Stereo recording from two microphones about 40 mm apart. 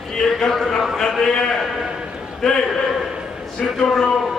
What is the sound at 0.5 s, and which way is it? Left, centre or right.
A man's voice, centre.